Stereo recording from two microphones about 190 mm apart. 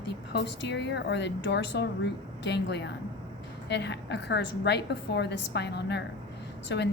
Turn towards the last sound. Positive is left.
turn(degrees=65)  # may be behind; listen again after turning